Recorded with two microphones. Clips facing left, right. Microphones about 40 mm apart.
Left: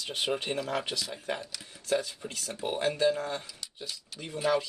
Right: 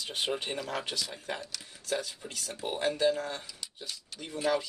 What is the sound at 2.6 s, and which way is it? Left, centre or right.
Speech, centre.